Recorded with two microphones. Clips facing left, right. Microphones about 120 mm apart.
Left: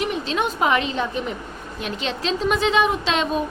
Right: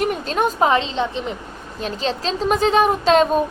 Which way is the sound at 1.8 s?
35° right (ahead or behind).